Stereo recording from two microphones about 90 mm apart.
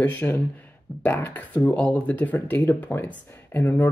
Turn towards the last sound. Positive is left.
turn(degrees=20)  # may be behind; listen again after turning